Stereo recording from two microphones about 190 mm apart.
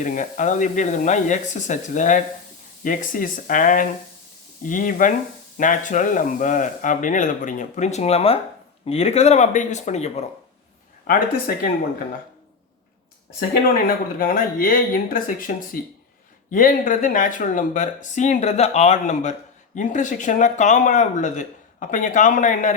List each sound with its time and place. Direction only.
0.0 s speech: 40° left (ahead or behind)
11.0 s speech: 50° left (ahead or behind)
13.8 s speech: 50° left (ahead or behind)